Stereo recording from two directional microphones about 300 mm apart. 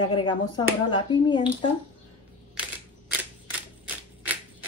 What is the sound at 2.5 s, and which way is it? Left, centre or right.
Camera, centre.